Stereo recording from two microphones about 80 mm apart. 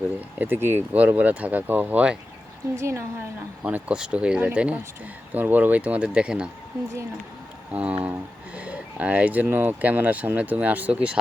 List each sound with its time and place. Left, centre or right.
0.3 s speech: right
2.7 s a woman's voice: right
3.6 s speech: right
7.7 s speech: centre